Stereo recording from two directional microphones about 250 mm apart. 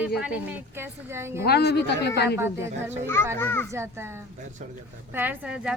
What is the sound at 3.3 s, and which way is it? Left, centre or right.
Speech, centre.